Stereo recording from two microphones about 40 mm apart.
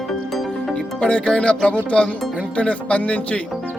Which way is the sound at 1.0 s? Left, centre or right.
Left.